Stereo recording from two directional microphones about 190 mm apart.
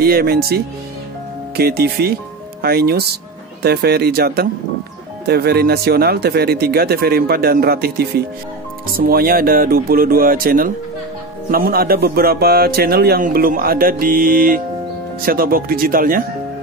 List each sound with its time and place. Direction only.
0.0 s a man's voice: 55° right (ahead or behind)
1.6 s a man's voice: 55° right (ahead or behind)